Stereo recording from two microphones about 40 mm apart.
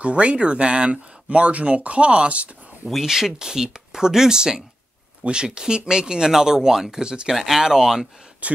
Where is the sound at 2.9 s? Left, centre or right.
Centre.